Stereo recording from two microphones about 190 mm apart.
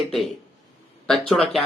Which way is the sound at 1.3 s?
Centre (ahead or behind).